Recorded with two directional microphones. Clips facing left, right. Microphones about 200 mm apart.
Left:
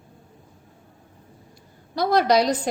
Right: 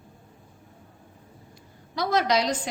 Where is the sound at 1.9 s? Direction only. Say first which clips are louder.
Left 5 dB; 35° left (ahead or behind).